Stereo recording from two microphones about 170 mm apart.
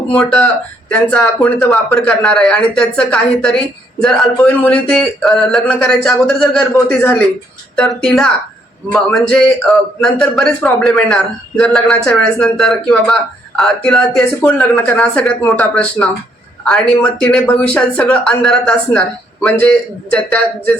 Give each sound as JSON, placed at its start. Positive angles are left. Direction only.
{"t": 0.1, "sound": "speech", "side_deg": 5}
{"t": 14.7, "sound": "speech", "side_deg": 15}
{"t": 14.9, "sound": "speech", "side_deg": 5}